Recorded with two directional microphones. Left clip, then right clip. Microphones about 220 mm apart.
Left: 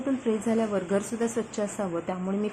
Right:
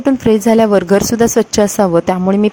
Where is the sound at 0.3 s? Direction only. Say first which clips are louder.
Right 18 dB; 45° right (ahead or behind).